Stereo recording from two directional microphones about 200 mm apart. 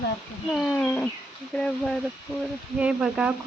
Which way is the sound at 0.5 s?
Centre (ahead or behind).